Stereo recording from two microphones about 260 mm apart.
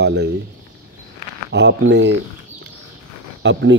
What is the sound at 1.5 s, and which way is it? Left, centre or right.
Speech, right.